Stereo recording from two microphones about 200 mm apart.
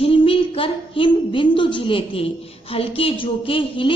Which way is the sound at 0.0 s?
25° left (ahead or behind).